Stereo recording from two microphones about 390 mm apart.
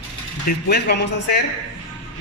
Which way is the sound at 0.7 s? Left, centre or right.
Left.